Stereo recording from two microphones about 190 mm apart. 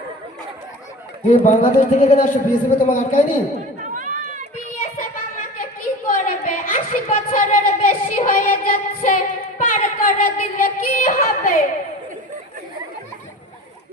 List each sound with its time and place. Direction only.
1.3 s a man's voice: 45° left (ahead or behind)
3.9 s run: 45° right (ahead or behind)
4.9 s a sound: 45° left (ahead or behind)